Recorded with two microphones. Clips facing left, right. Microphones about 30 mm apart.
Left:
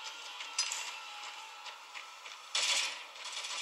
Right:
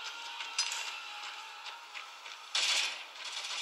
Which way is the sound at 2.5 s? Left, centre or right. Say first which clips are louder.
Right 2 dB; centre.